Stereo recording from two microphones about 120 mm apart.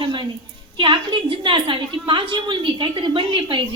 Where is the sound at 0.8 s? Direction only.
40° right (ahead or behind).